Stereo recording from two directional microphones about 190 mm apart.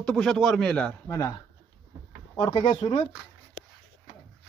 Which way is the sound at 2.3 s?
30° left (ahead or behind).